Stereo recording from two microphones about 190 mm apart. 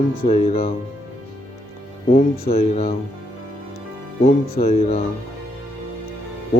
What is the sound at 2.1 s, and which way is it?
Speech, 30° left (ahead or behind).